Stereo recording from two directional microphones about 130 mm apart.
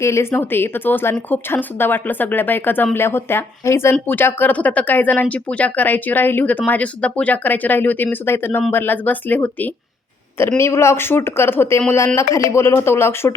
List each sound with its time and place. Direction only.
0.0 s speech: 20° left (ahead or behind)